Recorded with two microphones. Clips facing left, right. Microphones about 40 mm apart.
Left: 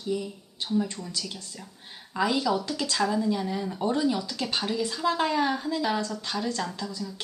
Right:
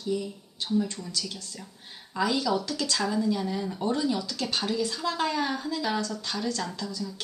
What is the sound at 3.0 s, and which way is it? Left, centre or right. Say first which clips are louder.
A woman's voice: left 2 dB; centre.